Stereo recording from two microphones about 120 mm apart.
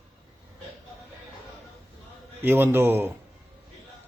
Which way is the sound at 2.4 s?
15° right (ahead or behind).